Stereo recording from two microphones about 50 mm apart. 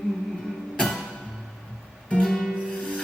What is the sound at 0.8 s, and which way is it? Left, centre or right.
Music, centre.